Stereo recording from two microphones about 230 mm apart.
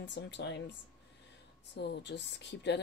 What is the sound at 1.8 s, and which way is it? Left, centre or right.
Speech, left.